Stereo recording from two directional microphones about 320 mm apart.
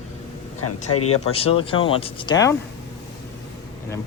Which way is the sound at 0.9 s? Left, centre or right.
Left.